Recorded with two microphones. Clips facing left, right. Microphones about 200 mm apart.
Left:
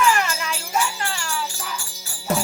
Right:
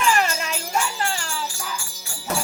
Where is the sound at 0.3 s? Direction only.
30° right (ahead or behind).